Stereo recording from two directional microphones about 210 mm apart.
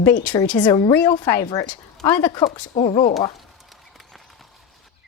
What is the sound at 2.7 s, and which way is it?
Speech, 30° left (ahead or behind).